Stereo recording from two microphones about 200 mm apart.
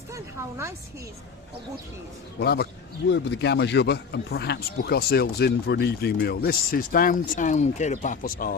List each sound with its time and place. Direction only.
0.1 s speech: 15° right (ahead or behind)
2.4 s speech: 50° left (ahead or behind)